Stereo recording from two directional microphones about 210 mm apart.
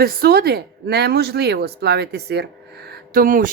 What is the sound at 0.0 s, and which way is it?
Speech, 50° right (ahead or behind).